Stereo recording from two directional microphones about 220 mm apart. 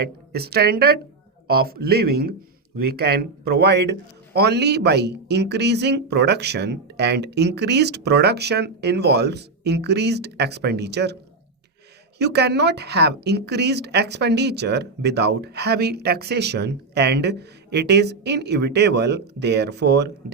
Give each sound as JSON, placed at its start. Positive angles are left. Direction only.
{"t": 0.0, "sound": "speech", "side_deg": -45}
{"t": 12.2, "sound": "speech", "side_deg": -50}